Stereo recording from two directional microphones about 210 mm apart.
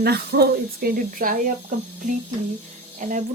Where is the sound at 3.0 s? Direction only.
40° right (ahead or behind).